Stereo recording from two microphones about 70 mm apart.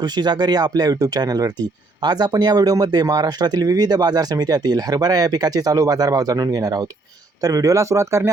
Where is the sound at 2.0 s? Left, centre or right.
Right.